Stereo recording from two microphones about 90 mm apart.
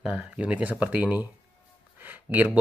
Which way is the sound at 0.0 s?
15° right (ahead or behind).